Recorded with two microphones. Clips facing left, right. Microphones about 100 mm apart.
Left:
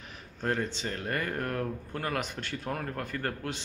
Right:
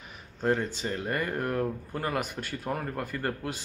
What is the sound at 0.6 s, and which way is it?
Speech, 5° right (ahead or behind).